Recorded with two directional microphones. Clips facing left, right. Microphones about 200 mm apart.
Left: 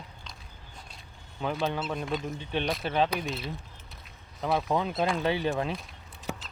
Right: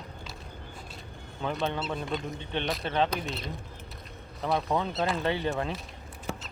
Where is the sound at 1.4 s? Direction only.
Centre (ahead or behind).